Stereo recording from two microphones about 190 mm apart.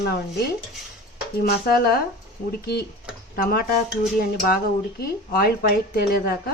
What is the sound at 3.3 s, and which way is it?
Speech, 50° left (ahead or behind).